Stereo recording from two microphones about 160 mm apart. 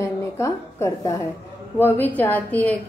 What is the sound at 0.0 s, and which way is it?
A woman's voice, 15° left (ahead or behind).